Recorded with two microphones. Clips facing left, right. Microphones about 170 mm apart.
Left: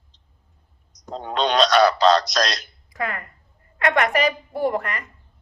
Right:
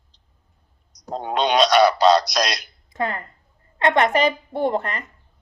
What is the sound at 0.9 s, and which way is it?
Clicking, 35° right (ahead or behind).